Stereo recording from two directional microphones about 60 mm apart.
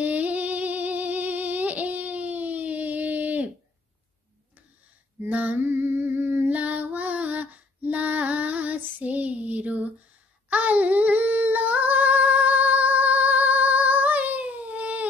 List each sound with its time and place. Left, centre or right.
0.0 s humming: right
5.3 s female singing: right